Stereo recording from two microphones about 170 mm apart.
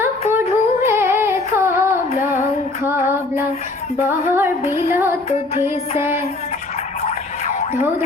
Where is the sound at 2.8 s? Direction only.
15° right (ahead or behind).